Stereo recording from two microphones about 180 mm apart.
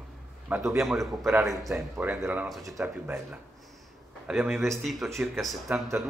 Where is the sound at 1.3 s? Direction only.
15° right (ahead or behind).